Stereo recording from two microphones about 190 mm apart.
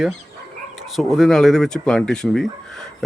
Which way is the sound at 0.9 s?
Centre (ahead or behind).